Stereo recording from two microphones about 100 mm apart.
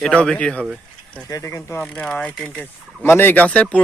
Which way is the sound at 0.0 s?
10° left (ahead or behind).